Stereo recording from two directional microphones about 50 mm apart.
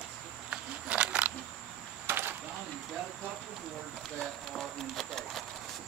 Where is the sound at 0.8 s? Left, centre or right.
Right.